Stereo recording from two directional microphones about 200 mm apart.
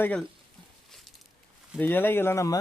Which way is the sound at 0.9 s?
Centre (ahead or behind).